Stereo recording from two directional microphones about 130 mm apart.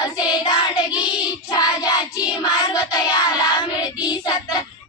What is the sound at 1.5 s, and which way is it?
Child singing, 30° left (ahead or behind).